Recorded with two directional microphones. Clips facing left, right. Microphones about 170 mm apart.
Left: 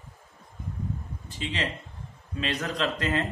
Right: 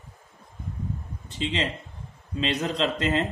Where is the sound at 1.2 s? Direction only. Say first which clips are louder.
Right 4 dB; 25° right (ahead or behind).